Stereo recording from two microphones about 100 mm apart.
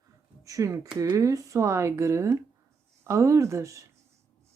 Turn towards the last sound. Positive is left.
turn(degrees=-30)  # may be behind; listen again after turning